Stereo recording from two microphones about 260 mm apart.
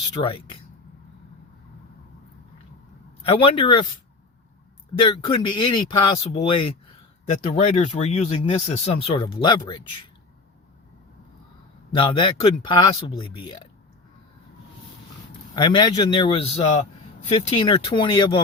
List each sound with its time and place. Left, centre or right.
0.2 s speech: left
3.2 s speech: left
4.9 s speech: centre
9.8 s speech: left
11.9 s speech: centre
15.5 s speech: centre